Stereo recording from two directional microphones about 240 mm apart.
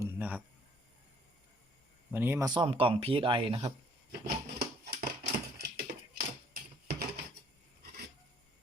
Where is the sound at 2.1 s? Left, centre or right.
Centre.